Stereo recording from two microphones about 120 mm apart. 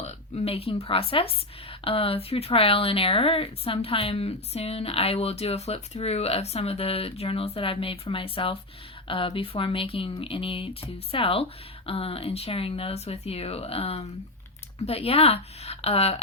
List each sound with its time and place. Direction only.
0.0 s speech: 55° left (ahead or behind)